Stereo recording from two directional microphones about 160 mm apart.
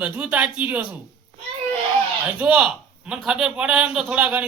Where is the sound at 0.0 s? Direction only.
10° right (ahead or behind).